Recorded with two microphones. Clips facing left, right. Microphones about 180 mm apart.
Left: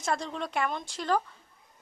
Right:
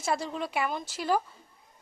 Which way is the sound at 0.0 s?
5° right (ahead or behind).